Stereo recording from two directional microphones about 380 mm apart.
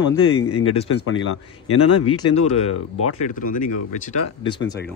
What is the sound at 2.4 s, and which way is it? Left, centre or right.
Speech, left.